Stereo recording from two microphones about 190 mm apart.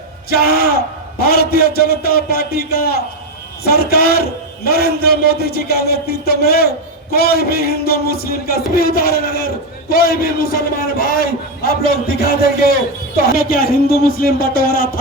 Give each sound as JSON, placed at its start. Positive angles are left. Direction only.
{"t": 0.3, "sound": "a man's voice", "side_deg": 55}